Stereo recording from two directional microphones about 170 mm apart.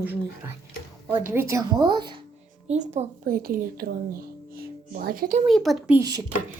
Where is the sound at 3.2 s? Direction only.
60° right (ahead or behind).